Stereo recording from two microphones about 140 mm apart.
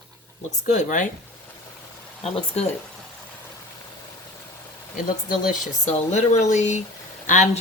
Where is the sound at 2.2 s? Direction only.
45° left (ahead or behind).